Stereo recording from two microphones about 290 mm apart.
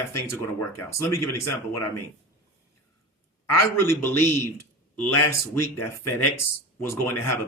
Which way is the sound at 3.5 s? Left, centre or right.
Centre.